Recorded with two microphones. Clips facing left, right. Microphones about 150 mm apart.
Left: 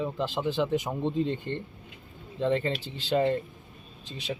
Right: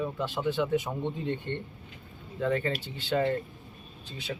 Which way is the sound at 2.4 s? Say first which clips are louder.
Left 2 dB; 25° left (ahead or behind).